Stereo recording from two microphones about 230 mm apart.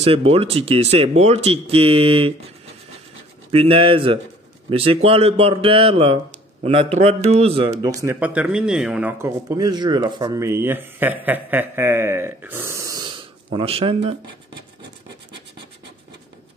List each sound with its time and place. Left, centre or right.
0.0 s speech: right